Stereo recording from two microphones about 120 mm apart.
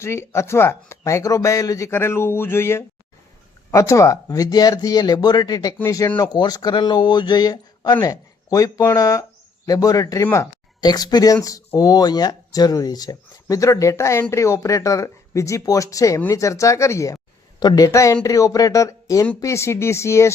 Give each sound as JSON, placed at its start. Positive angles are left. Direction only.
{"t": 0.0, "sound": "speech", "side_deg": 25}